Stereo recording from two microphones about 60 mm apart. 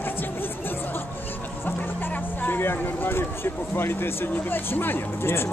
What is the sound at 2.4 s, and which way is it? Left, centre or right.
Speech, left.